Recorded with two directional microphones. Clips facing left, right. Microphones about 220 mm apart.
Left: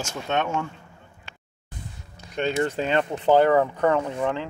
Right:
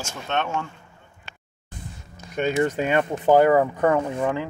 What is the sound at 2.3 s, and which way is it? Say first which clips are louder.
Speech: right 2 dB; 10° right (ahead or behind).